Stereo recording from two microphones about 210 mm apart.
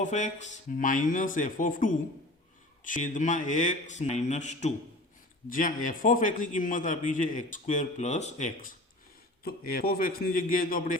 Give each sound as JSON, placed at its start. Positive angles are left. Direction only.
{"t": 0.0, "sound": "a man's voice", "side_deg": 35}